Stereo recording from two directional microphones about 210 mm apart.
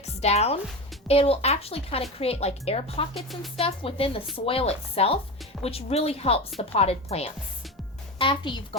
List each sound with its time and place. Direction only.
0.0 s speech: 30° left (ahead or behind)
3.2 s speech: centre (ahead or behind)
3.6 s speech: 25° left (ahead or behind)